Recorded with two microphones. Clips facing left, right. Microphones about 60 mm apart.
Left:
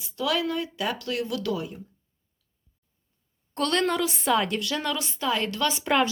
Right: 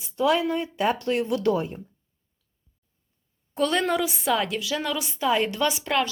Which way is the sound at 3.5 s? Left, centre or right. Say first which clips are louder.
Right 1 dB; centre.